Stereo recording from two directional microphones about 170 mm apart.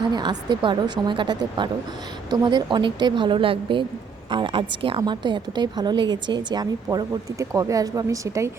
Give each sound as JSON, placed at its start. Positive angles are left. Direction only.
{"t": 0.1, "sound": "a woman's voice", "side_deg": -25}